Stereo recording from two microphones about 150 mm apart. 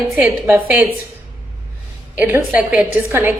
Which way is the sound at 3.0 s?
15° right (ahead or behind).